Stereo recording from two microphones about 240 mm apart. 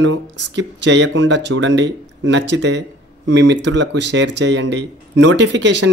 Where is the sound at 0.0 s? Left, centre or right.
Right.